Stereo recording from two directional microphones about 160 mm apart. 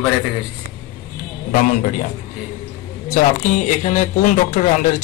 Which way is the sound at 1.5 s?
55° left (ahead or behind).